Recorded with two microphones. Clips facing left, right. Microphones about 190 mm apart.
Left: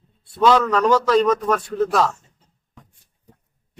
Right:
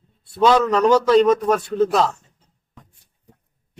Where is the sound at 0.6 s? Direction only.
20° right (ahead or behind).